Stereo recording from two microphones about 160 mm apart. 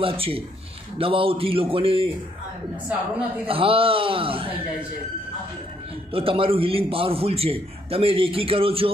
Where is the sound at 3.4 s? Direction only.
35° right (ahead or behind).